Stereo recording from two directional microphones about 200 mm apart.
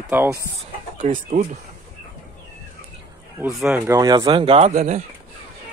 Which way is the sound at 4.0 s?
20° right (ahead or behind).